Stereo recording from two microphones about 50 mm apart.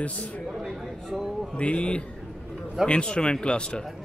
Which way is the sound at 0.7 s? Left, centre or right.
Centre.